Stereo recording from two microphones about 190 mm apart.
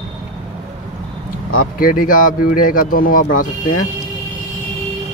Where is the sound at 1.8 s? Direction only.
45° left (ahead or behind).